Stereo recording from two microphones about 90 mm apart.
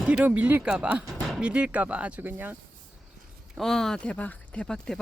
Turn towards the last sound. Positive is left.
turn(degrees=10)  # may be behind; listen again after turning